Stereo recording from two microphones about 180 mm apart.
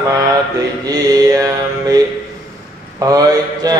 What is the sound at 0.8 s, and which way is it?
Mantra, 20° right (ahead or behind).